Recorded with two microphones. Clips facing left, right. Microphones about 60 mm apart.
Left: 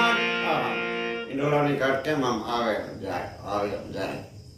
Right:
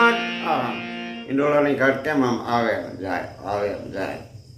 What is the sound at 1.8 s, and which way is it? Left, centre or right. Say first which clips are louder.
Speech: right 5 dB; right.